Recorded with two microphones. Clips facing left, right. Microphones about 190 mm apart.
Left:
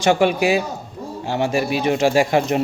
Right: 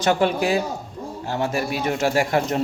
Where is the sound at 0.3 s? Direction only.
80° left.